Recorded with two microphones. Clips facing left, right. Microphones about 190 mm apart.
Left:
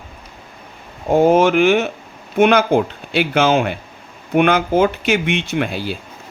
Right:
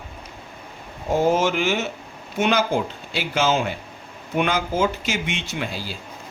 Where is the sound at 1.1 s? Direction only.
60° left (ahead or behind).